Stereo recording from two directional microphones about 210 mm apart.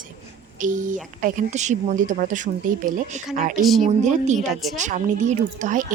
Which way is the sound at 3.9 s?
35° right (ahead or behind).